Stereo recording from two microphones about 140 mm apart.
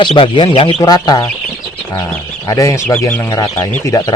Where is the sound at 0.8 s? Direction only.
30° left (ahead or behind).